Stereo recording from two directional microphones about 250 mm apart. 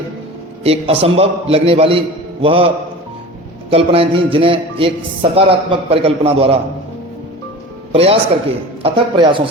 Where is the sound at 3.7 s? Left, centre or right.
Right.